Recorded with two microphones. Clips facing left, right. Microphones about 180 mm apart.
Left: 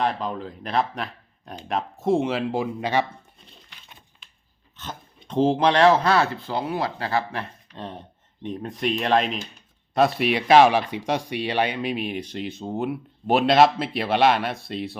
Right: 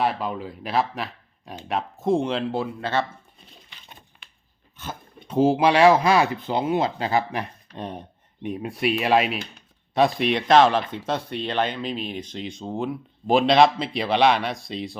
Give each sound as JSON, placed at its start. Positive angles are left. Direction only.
{"t": 0.0, "sound": "speech", "side_deg": -5}
{"t": 4.2, "sound": "a sound", "side_deg": -65}
{"t": 4.8, "sound": "speech", "side_deg": -10}